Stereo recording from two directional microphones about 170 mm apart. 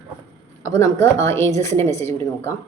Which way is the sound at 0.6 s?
20° left (ahead or behind).